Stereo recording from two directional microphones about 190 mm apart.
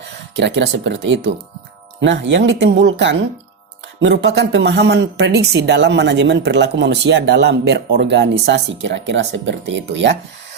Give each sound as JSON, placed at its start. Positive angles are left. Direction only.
{"t": 0.3, "sound": "speech", "side_deg": -70}